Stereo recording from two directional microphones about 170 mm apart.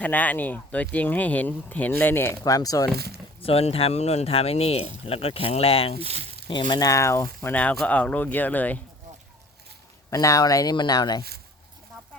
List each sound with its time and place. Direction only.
0.0 s speech: 10° left (ahead or behind)
2.9 s speech: 70° right (ahead or behind)
3.4 s speech: 35° left (ahead or behind)
6.0 s speech: 35° right (ahead or behind)
6.5 s speech: 25° left (ahead or behind); by 8.8 s 10° left (ahead or behind)
10.1 s speech: 20° left (ahead or behind)